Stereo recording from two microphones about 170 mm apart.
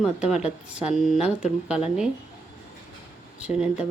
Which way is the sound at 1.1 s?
40° left (ahead or behind).